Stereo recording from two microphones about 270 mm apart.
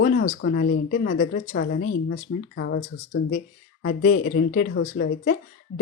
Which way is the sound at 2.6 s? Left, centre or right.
Left.